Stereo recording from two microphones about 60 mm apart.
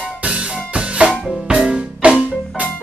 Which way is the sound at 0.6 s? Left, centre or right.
Centre.